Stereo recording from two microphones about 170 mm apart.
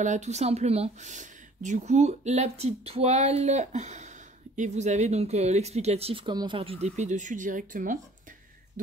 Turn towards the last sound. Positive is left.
turn(degrees=-50)  # may be behind; listen again after turning